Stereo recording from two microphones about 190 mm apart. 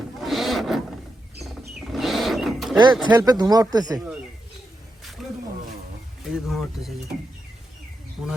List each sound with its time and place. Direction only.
0.2 s a sound: centre (ahead or behind)
1.9 s wild animals: centre (ahead or behind)
2.7 s speech: 25° right (ahead or behind)
5.2 s wild animals: centre (ahead or behind)
6.3 s speech: centre (ahead or behind)